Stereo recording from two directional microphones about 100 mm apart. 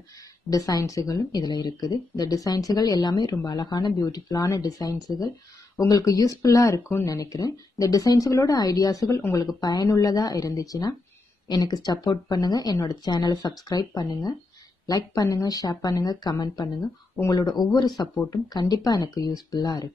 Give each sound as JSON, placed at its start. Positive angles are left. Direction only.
{"t": 0.5, "sound": "speech", "side_deg": 40}